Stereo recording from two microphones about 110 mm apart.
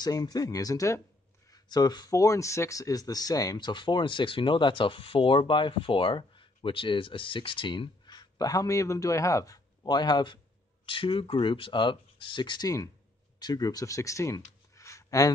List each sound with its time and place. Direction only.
0.0 s speech: 35° left (ahead or behind)